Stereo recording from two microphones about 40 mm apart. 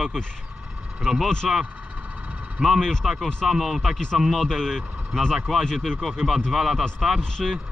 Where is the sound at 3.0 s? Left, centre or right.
Centre.